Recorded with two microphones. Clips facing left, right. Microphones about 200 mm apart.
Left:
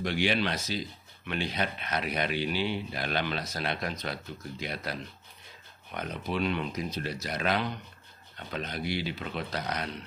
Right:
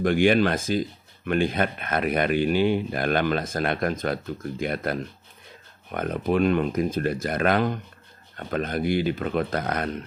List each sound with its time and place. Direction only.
0.0 s speech: 50° right (ahead or behind)